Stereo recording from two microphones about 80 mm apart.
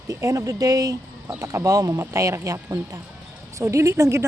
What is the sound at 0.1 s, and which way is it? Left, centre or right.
Speech, right.